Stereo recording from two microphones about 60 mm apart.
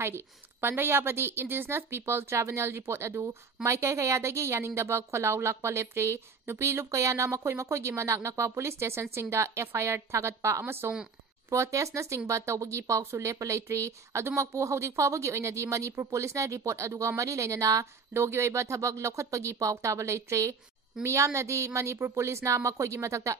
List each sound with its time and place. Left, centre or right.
0.0 s a woman's voice: right
10.6 s a woman's voice: right
11.5 s speech: right
18.1 s speech: right